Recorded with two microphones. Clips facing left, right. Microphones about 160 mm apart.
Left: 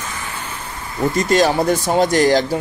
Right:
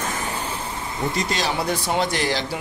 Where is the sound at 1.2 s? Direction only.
50° left (ahead or behind).